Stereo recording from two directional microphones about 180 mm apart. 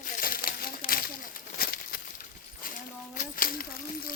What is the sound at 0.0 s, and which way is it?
Crushing, 50° left (ahead or behind).